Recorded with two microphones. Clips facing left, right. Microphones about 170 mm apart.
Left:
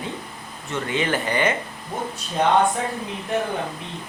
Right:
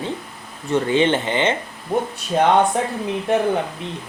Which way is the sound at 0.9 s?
30° right (ahead or behind).